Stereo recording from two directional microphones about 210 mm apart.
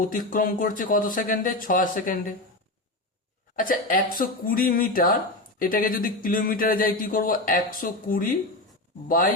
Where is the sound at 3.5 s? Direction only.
40° left (ahead or behind).